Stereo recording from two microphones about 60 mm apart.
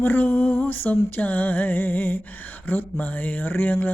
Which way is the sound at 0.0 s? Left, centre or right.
Left.